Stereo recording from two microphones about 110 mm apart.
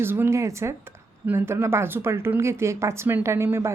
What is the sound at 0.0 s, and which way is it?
A woman's voice, 20° right (ahead or behind).